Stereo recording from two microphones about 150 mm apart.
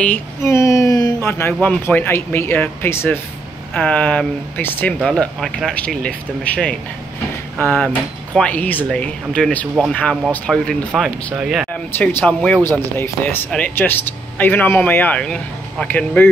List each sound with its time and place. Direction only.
0.4 s speech: 20° left (ahead or behind); by 11.6 s 5° right (ahead or behind)
12.0 s speech: 10° left (ahead or behind)